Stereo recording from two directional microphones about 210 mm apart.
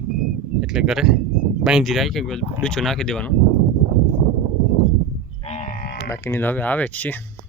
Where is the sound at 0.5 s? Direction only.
Centre (ahead or behind).